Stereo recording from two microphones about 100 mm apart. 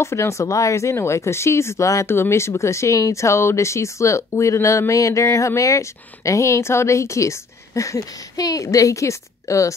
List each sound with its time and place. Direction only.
0.0 s speech: 30° left (ahead or behind)